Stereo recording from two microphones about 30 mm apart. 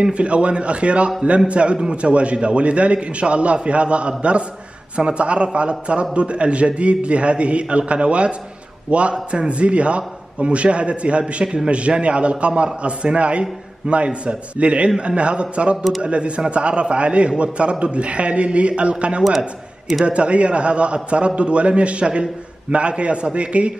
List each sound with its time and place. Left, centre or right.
0.1 s a man's voice: right
11.4 s a man's voice: right
12.0 s a man's voice: right